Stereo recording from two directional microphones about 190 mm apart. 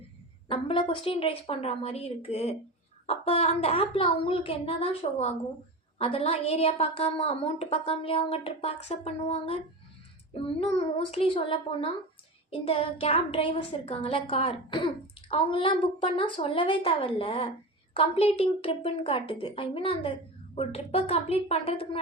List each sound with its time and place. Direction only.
0.4 s a woman's voice: 30° left (ahead or behind)